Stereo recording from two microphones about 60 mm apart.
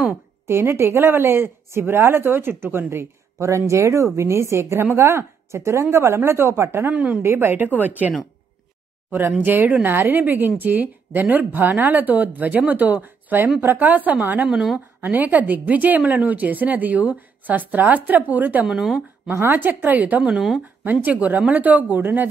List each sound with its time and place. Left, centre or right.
0.5 s speech: right
6.9 s a woman's voice: right
7.2 s a woman's voice: right
9.4 s a woman's voice: right
14.5 s speech: centre
15.0 s a woman's voice: right
18.7 s speech: centre
19.5 s a woman's voice: right
20.3 s speech: centre
20.8 s a woman's voice: right